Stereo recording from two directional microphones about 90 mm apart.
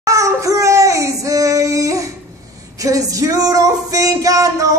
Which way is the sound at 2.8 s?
40° right (ahead or behind).